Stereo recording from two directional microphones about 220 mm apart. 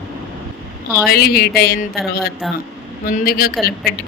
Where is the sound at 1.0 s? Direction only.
45° left (ahead or behind).